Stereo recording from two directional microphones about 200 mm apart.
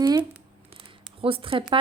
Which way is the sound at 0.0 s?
20° right (ahead or behind).